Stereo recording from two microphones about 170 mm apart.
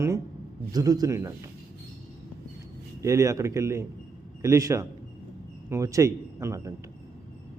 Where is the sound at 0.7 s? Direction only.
20° right (ahead or behind).